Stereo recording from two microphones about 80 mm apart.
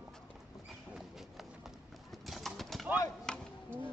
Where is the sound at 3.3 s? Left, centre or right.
Centre.